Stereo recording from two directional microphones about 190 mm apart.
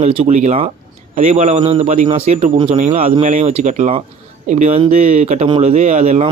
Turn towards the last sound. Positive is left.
turn(degrees=-35)  # may be behind; listen again after turning